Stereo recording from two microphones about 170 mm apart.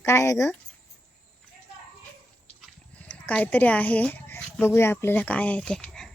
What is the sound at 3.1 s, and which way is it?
Speech, 5° left (ahead or behind).